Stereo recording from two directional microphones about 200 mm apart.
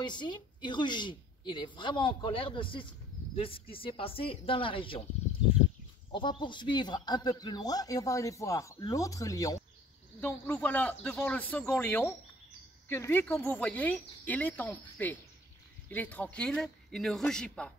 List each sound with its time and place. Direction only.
0.0 s a woman's voice: 20° left (ahead or behind)
6.1 s a man's voice: 25° left (ahead or behind); by 17.7 s 5° left (ahead or behind)